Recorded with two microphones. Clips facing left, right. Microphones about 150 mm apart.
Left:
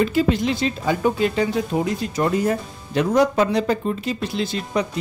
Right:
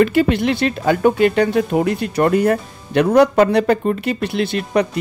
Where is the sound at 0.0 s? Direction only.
65° right (ahead or behind).